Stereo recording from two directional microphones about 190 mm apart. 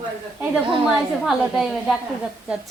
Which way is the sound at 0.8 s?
Centre (ahead or behind).